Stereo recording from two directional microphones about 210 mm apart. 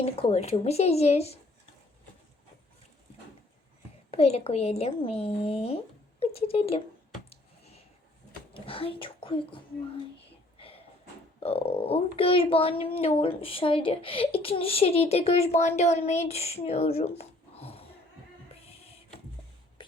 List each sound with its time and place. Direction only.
0.0 s a child's voice: 30° left (ahead or behind)
4.1 s a child's voice: 30° left (ahead or behind)
7.3 s a sound: 30° left (ahead or behind)
8.5 s a child's voice: 25° left (ahead or behind)
11.4 s a child's voice: 30° left (ahead or behind)